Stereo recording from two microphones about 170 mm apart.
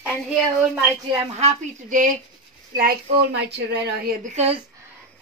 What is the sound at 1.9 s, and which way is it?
Speech, 50° right (ahead or behind).